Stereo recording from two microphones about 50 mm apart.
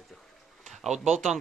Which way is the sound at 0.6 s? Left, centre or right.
Centre.